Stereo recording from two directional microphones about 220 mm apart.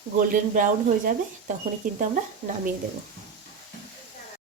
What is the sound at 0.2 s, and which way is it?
Speech, 40° right (ahead or behind).